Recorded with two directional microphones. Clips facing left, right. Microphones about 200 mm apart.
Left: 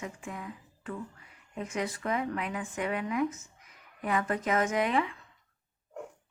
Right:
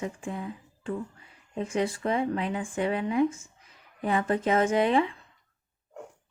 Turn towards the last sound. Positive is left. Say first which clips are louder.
# right 5 dB
turn(degrees=-30)  # may be behind; listen again after turning